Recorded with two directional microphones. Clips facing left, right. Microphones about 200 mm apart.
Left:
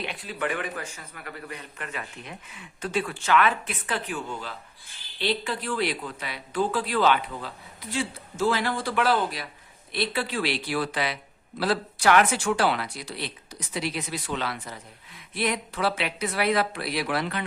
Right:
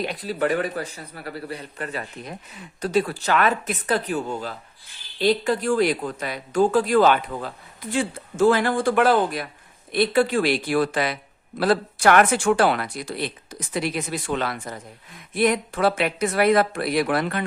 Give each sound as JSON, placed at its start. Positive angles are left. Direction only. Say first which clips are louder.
{"t": 0.0, "sound": "a man's voice", "louder": "right 7 dB", "side_deg": -40}